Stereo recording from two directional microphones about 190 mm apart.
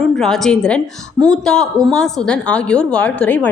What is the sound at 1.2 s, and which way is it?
Speech, 20° right (ahead or behind).